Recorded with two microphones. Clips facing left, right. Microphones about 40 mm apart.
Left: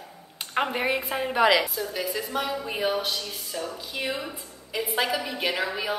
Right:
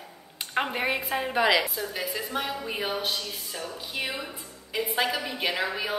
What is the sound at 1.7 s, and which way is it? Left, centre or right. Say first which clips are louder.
Speech: left 2 dB; centre.